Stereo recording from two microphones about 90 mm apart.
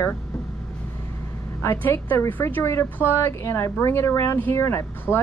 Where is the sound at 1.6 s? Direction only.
30° left (ahead or behind).